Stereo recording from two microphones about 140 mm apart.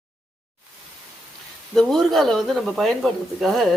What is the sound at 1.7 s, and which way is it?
Speech, 5° left (ahead or behind).